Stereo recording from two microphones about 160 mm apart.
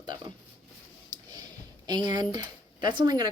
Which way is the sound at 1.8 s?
25° right (ahead or behind).